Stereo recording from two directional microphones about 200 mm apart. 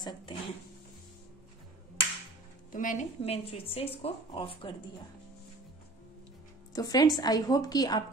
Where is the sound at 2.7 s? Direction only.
40° left (ahead or behind).